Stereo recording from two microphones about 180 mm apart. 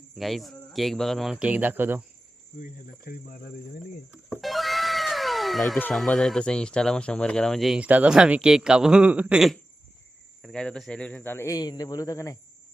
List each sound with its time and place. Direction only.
0.2 s speech: centre (ahead or behind)
2.6 s speech: 50° left (ahead or behind)
4.4 s speech: centre (ahead or behind); by 12.4 s 20° left (ahead or behind)